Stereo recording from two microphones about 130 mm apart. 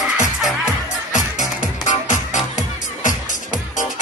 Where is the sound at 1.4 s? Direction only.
70° left (ahead or behind).